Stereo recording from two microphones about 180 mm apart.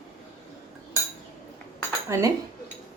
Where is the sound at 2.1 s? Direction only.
15° right (ahead or behind).